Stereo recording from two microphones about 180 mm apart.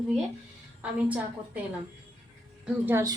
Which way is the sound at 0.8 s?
10° right (ahead or behind).